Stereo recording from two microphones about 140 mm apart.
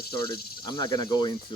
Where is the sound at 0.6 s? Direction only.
35° left (ahead or behind).